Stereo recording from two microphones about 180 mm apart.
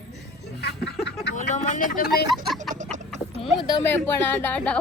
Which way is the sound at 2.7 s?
40° right (ahead or behind).